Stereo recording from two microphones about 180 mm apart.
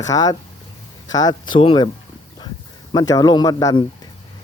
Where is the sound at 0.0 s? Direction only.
20° left (ahead or behind).